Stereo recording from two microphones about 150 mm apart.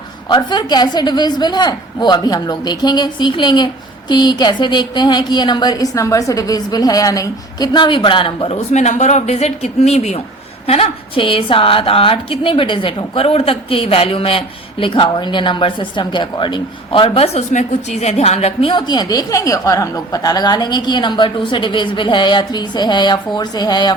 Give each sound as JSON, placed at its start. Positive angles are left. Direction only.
{"t": 0.3, "sound": "a woman's voice", "side_deg": 30}
{"t": 8.5, "sound": "a woman's voice", "side_deg": 50}
{"t": 18.7, "sound": "a woman's voice", "side_deg": 30}